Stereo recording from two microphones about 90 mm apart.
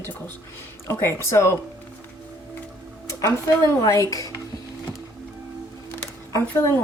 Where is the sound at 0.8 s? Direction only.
30° left (ahead or behind).